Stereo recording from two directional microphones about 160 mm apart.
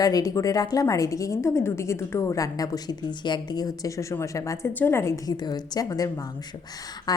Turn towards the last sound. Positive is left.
turn(degrees=25)  # may be behind; listen again after turning